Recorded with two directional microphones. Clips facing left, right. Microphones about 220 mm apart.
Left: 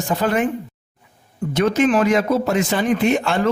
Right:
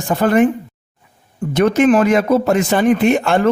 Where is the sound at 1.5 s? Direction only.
55° right (ahead or behind).